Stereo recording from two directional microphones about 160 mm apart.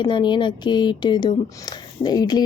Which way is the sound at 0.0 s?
30° left (ahead or behind).